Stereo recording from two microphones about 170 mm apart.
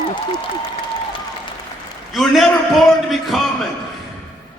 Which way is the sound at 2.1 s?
Centre (ahead or behind).